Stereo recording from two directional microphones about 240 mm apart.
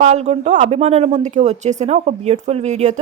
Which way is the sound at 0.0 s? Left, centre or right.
Right.